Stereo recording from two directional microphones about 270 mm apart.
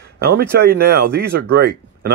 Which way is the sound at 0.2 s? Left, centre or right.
Right.